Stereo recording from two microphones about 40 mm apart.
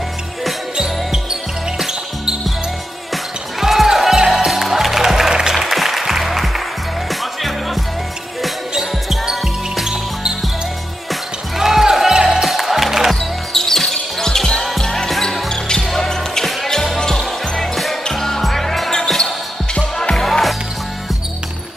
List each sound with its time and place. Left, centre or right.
0.7 s basketball bounce: centre
1.8 s music: centre
3.5 s music: centre
9.1 s basketball bounce: centre
11.1 s music: centre
13.1 s basketball bounce: centre
14.8 s music: centre
15.8 s basketball bounce: centre
16.6 s music: centre
17.6 s basketball bounce: centre
20.0 s music: centre
20.2 s music: centre